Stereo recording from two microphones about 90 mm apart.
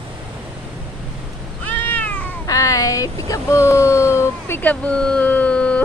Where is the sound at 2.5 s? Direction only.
40° left (ahead or behind).